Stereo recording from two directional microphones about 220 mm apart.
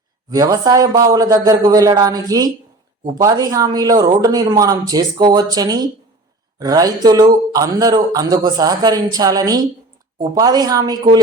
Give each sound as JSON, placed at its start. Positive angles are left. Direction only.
{"t": 0.3, "sound": "speech", "side_deg": -15}